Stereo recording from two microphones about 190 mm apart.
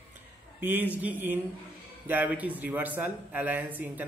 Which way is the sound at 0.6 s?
10° right (ahead or behind).